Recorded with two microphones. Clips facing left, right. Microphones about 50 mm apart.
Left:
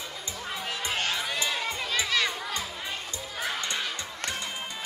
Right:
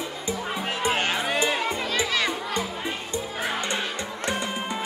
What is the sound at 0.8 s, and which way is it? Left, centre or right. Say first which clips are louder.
Music: right 6 dB; right.